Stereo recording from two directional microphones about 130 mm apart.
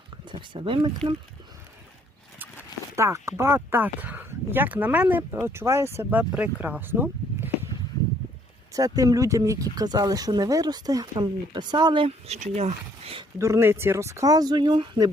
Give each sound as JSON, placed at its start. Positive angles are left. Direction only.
{"t": 0.3, "sound": "speech", "side_deg": -40}
{"t": 2.9, "sound": "speech", "side_deg": -20}
{"t": 8.7, "sound": "speech", "side_deg": -25}
{"t": 13.4, "sound": "speech", "side_deg": -20}